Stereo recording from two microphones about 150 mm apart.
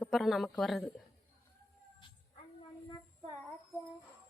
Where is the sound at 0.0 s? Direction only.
Centre (ahead or behind).